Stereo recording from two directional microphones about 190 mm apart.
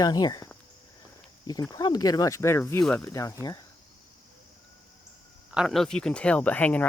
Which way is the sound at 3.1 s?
15° left (ahead or behind).